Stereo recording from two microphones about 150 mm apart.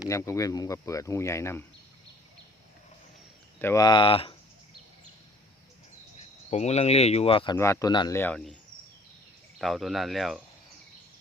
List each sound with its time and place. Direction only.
0.0 s speech: 20° left (ahead or behind)
3.6 s speech: 15° left (ahead or behind)
3.8 s speech: 35° left (ahead or behind)
6.5 s speech: 45° left (ahead or behind)
7.6 s speech: 20° left (ahead or behind)
9.6 s speech: centre (ahead or behind)